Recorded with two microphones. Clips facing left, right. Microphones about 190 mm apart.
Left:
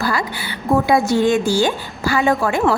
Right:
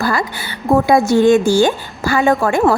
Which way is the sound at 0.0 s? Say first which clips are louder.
Right 3 dB; 50° right (ahead or behind).